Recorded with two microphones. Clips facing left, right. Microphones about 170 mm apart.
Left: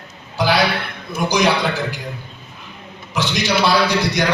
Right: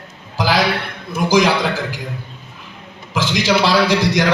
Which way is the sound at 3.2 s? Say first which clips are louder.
Right 2 dB; 90° right.